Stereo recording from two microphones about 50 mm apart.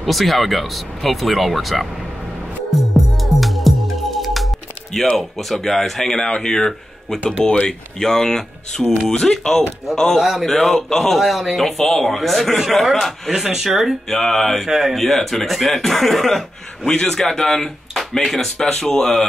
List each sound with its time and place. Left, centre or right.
0.0 s speech: centre
2.7 s music: centre
5.1 s speech: centre
14.0 s speech: centre
14.7 s speech: centre
15.0 s speech: centre